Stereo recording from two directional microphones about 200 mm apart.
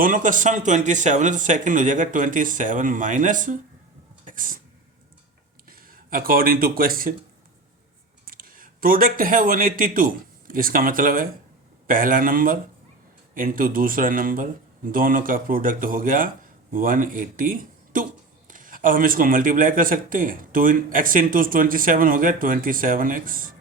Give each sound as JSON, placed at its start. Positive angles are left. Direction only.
{"t": 0.0, "sound": "speech", "side_deg": -40}
{"t": 4.3, "sound": "a sound", "side_deg": -40}
{"t": 5.6, "sound": "speech", "side_deg": -45}
{"t": 8.2, "sound": "speech", "side_deg": -45}